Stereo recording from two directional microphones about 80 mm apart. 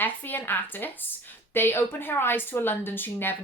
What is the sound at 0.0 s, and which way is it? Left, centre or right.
A woman's voice, left.